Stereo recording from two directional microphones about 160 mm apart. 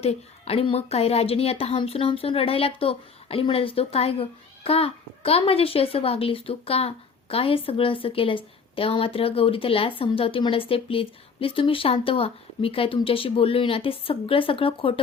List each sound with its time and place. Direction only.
0.0 s a woman's voice: 40° left (ahead or behind)